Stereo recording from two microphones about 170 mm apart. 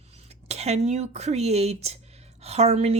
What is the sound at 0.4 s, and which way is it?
Speech, 40° right (ahead or behind).